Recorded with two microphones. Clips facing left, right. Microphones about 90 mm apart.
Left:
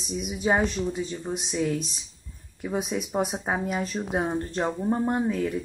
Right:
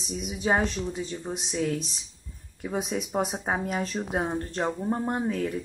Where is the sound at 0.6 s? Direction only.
5° left (ahead or behind).